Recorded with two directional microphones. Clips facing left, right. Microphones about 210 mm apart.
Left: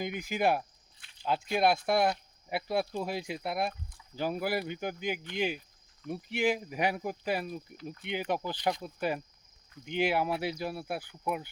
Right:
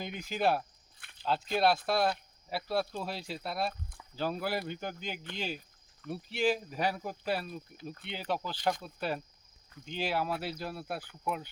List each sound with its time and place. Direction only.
0.0 s speech: 10° left (ahead or behind)